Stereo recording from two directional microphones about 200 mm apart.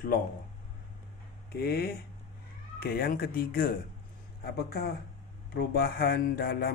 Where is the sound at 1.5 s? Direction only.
50° left (ahead or behind).